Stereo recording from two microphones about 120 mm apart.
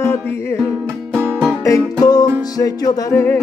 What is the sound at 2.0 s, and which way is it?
Music, 35° left (ahead or behind).